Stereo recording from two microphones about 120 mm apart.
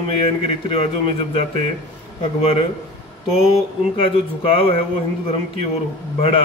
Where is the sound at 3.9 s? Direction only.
50° left (ahead or behind).